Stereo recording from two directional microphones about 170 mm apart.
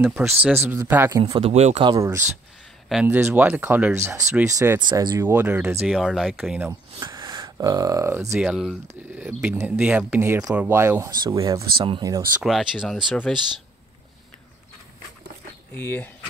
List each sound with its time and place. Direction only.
0.0 s speech: 5° right (ahead or behind)
1.2 s speech: 35° right (ahead or behind)
2.9 s speech: 10° right (ahead or behind); by 5.2 s 25° right (ahead or behind)
5.2 s speech: 10° right (ahead or behind)
7.0 s speech: 25° right (ahead or behind)
8.4 s speech: 5° right (ahead or behind); by 12.2 s 25° right (ahead or behind)
12.4 s speech: centre (ahead or behind)
15.7 s speech: 10° left (ahead or behind)